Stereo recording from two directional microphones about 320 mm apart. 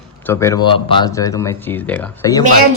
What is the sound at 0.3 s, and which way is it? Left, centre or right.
Speech, centre.